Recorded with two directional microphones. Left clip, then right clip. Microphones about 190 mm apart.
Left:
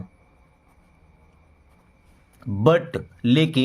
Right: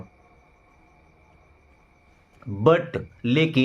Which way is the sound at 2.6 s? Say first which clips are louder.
Even; 40° left (ahead or behind).